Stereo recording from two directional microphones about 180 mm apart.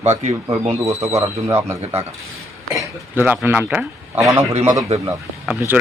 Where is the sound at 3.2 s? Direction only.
10° right (ahead or behind).